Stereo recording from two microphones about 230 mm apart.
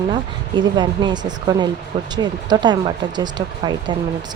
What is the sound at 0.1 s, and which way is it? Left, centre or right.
Speech, centre.